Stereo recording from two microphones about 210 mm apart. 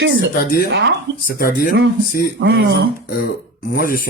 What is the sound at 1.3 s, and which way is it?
Speech, 45° left (ahead or behind).